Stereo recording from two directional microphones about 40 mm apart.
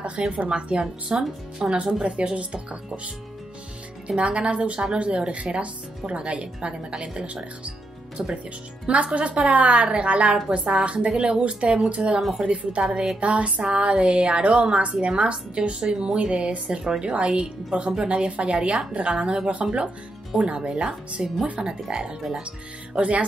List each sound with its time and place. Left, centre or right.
0.3 s a woman's voice: right
1.1 s a woman's voice: centre
2.0 s speech: right
4.1 s a woman's voice: right
8.2 s speech: centre
9.1 s a woman's voice: right
22.9 s speech: right